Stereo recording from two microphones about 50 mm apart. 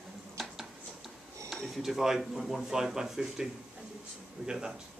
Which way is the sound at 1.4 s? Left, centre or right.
Centre.